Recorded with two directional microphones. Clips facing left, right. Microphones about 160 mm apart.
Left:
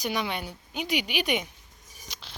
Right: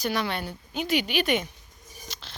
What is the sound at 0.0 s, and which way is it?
Speech, 15° left (ahead or behind).